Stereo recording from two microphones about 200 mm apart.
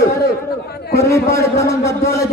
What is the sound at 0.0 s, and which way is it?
Chatter, 15° left (ahead or behind).